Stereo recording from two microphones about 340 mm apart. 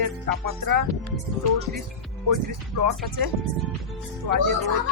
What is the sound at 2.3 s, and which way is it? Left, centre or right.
Speech, right.